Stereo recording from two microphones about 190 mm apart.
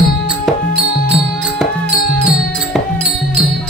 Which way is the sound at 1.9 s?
45° left (ahead or behind).